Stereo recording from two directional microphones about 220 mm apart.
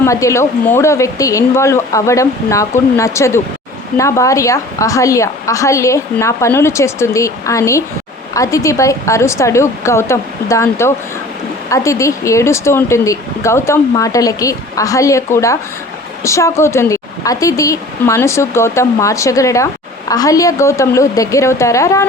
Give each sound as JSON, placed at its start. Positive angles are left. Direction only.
{"t": 0.0, "sound": "a woman's voice", "side_deg": 15}